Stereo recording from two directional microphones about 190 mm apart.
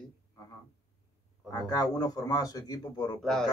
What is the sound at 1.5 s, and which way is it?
Speech, 20° left (ahead or behind).